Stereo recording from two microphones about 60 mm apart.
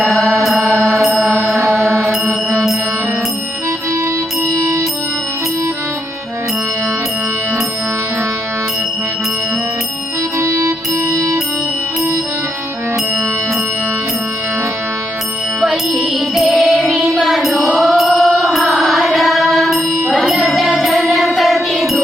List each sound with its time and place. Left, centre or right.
0.4 s mantra: centre
2.0 s mantra: right
4.4 s music: right
10.3 s music: right
16.0 s music: centre